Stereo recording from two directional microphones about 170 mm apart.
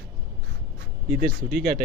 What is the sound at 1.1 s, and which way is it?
Speech, 55° right (ahead or behind).